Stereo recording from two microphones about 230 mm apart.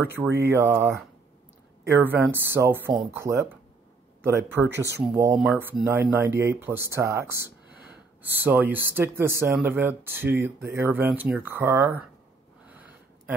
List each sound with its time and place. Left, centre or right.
0.0 s speech: centre
4.6 s speech: centre
12.6 s a sound: centre